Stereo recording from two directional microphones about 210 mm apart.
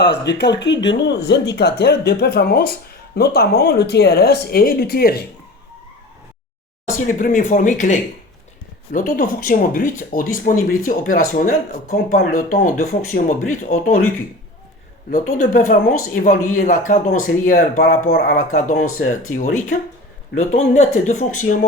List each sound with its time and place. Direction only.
0.0 s speech: 55° left (ahead or behind)
7.0 s speech: 40° left (ahead or behind)
15.4 s speech: 40° left (ahead or behind)